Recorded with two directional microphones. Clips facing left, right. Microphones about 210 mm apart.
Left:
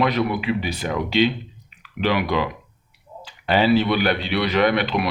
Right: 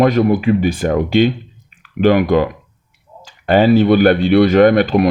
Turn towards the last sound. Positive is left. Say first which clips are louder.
# right 9 dB
turn(degrees=-45)  # may be behind; listen again after turning